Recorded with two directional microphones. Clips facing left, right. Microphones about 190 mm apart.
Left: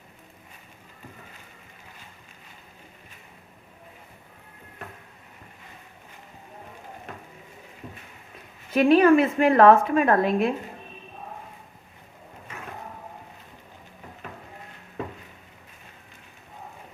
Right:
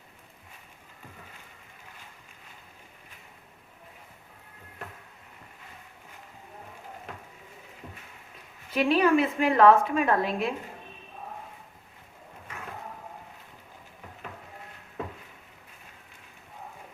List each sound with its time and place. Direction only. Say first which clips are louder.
8.7 s a woman's voice: left 6 dB; 50° left (ahead or behind)